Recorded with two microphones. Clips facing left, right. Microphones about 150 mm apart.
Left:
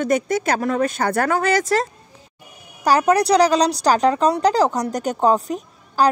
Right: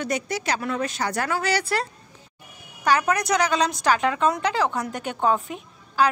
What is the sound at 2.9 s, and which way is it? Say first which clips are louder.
A woman's voice: left 6 dB; 35° left (ahead or behind).